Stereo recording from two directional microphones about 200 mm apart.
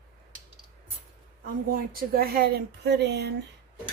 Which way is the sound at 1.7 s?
45° right (ahead or behind).